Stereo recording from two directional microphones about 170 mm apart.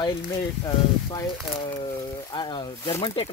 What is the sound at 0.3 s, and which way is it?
Speech, 20° left (ahead or behind).